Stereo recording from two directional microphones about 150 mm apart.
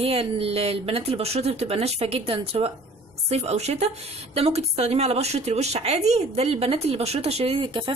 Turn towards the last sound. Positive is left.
turn(degrees=-35)  # may be behind; listen again after turning